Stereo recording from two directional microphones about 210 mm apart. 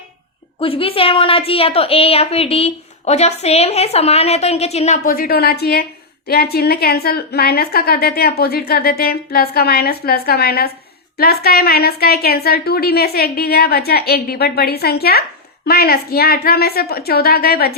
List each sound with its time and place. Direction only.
0.6 s a woman's voice: 25° left (ahead or behind); by 17.7 s 45° left (ahead or behind)